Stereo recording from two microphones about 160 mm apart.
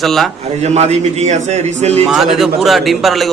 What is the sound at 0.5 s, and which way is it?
A man's voice, 45° right (ahead or behind).